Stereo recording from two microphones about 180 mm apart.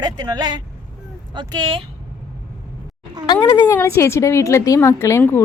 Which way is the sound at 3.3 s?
25° left (ahead or behind).